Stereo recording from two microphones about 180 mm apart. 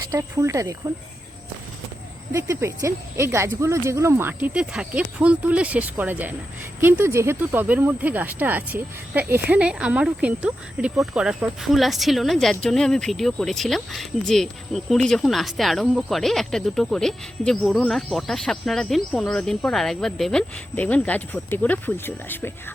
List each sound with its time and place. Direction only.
0.1 s speech: 15° right (ahead or behind)
2.3 s speech: 15° right (ahead or behind); by 22.5 s 10° left (ahead or behind)